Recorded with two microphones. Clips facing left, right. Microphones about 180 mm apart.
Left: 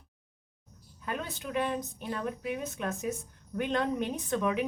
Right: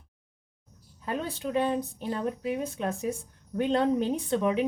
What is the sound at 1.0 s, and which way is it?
Speech, 30° right (ahead or behind).